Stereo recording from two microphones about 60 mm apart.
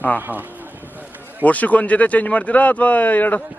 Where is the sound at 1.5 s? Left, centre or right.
Left.